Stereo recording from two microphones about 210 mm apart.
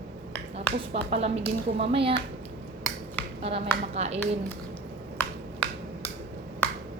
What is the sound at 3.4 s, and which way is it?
A woman's voice, 30° right (ahead or behind).